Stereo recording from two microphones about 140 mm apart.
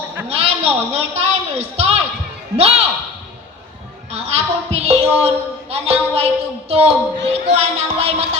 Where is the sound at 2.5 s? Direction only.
20° right (ahead or behind).